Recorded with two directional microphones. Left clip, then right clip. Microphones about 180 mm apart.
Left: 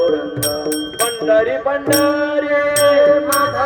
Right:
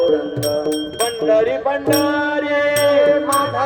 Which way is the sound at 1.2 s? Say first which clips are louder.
Left 1 dB; 50° right (ahead or behind).